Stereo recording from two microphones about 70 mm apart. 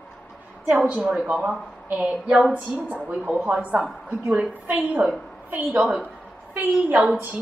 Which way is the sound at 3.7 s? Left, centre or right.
Centre.